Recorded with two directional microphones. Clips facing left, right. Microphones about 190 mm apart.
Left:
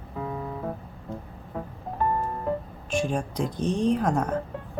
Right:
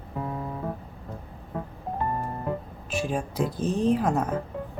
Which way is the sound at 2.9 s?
5° right (ahead or behind).